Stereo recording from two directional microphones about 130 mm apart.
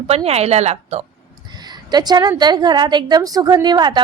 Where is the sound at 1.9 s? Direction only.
30° right (ahead or behind).